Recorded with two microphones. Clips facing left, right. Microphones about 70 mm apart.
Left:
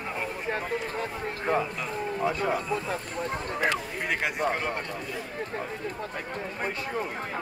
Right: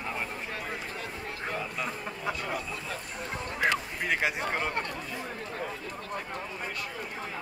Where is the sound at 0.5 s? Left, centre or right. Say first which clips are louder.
Left 6 dB; left.